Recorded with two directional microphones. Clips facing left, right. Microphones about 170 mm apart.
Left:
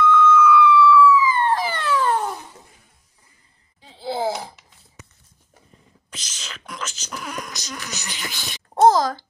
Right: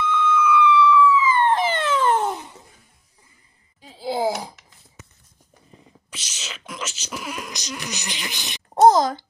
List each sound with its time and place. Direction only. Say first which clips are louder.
0.0 s police car: left 5 dB; 20° right (ahead or behind)
3.8 s wail: right 1 dB; 10° right (ahead or behind)
6.1 s whispering: right 1 dB; 5° right (ahead or behind)
7.5 s a sound: right 2 dB; 15° right (ahead or behind)